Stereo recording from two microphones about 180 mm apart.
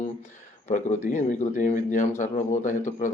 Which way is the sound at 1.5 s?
45° left (ahead or behind).